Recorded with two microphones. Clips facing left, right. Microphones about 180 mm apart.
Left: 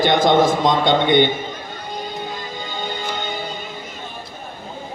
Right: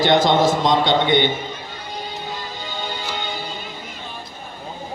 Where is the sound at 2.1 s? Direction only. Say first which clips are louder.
Left 2 dB; 50° left (ahead or behind).